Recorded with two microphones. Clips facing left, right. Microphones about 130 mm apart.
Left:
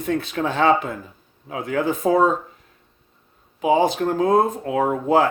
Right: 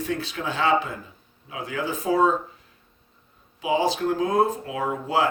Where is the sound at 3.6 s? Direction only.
55° left (ahead or behind).